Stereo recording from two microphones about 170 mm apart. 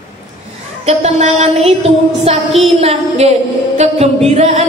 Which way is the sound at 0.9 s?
40° right (ahead or behind).